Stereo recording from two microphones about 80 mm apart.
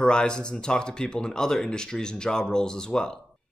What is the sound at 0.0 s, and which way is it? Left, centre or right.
Speech, centre.